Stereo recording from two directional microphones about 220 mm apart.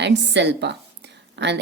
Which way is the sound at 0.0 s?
50° right (ahead or behind).